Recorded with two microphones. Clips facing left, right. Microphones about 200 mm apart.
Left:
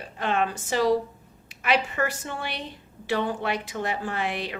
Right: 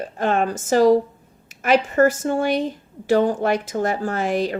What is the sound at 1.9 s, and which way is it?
A woman's voice, 45° right (ahead or behind).